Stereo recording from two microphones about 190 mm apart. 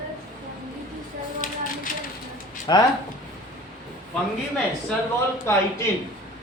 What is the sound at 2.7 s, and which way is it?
Speech, 25° left (ahead or behind).